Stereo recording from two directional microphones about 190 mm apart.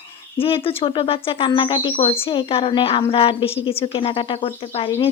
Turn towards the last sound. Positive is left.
turn(degrees=30)  # may be behind; listen again after turning